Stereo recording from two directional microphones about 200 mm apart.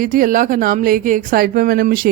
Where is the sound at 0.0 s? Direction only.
45° right (ahead or behind).